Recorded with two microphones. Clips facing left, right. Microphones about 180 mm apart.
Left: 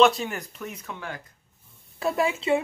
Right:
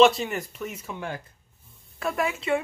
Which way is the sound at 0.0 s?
Centre (ahead or behind).